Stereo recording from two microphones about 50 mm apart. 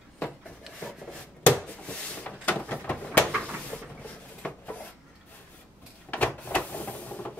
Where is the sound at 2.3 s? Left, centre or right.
Left.